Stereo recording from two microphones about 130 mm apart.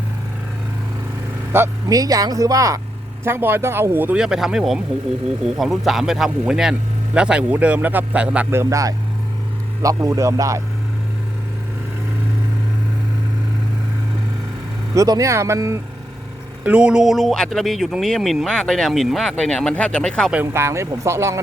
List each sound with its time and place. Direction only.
1.5 s speech: 25° right (ahead or behind)
8.4 s speech: 20° right (ahead or behind)
14.9 s speech: 25° right (ahead or behind)
16.6 s a man's voice: 10° right (ahead or behind); by 20.3 s 5° left (ahead or behind)
20.3 s speech: 15° right (ahead or behind)